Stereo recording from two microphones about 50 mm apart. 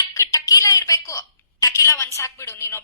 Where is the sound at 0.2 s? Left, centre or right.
Left.